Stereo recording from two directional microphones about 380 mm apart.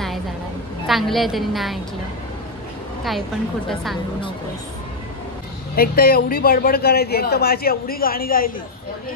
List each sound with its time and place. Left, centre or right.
0.8 s a woman's voice: centre
3.0 s a woman's voice: centre
5.8 s speech: left